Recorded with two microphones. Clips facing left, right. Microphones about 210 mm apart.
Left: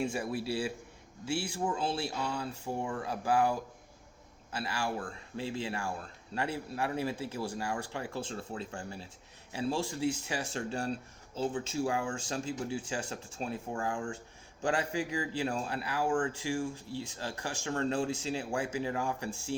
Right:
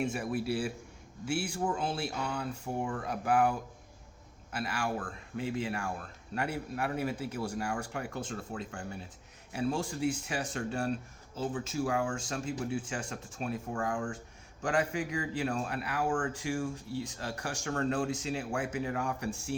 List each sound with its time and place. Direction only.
0.1 s a man's voice: 25° left (ahead or behind)
4.5 s a man's voice: 30° left (ahead or behind)